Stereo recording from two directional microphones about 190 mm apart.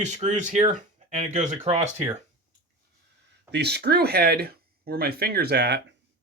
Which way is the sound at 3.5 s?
60° right (ahead or behind).